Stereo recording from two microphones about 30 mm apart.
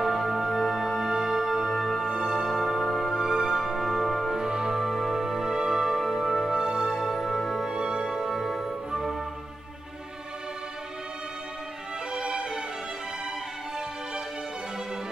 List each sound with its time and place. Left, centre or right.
0.0 s music: centre
1.8 s music: centre
3.1 s music: centre
4.3 s music: right
4.7 s music: centre
5.9 s music: centre
6.5 s music: right
6.9 s music: centre
7.6 s music: right; by 9.1 s centre
12.1 s music: right